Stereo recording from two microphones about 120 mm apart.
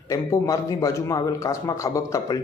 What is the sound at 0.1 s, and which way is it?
A man's voice, 25° left (ahead or behind).